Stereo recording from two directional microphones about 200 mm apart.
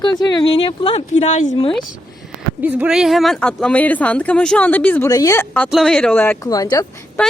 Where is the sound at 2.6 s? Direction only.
10° right (ahead or behind); by 7.0 s 20° left (ahead or behind).